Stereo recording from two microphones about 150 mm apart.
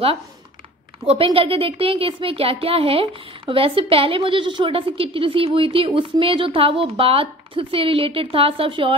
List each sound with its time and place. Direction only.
1.0 s speech: 40° right (ahead or behind)